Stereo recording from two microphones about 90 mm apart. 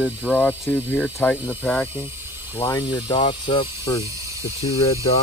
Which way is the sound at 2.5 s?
55° left (ahead or behind).